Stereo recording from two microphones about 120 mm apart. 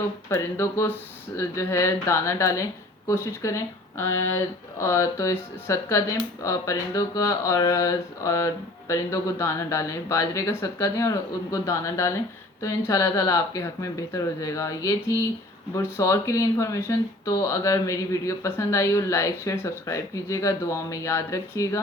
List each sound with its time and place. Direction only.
0.3 s speech: 20° left (ahead or behind)